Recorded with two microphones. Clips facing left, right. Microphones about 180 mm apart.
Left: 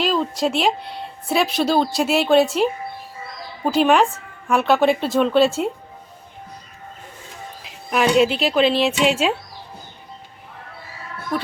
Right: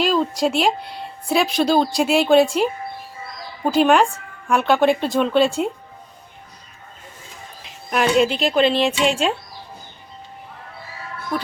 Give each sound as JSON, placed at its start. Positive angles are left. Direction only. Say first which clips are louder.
{"t": 0.0, "sound": "speech", "louder": "right 1 dB", "side_deg": 0}
{"t": 7.6, "sound": "speech", "louder": "left 1 dB", "side_deg": 0}